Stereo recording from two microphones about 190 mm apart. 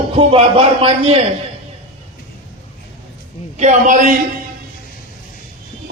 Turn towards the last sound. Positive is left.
turn(degrees=-40)  # may be behind; listen again after turning